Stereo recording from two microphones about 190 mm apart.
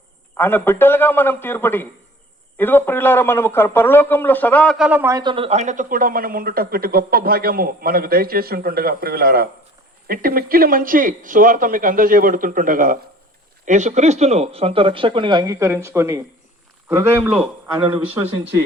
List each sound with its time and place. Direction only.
0.3 s a man's voice: 10° left (ahead or behind)
4.9 s speech: 10° right (ahead or behind)
5.2 s speech: 30° right (ahead or behind); by 18.2 s 10° right (ahead or behind)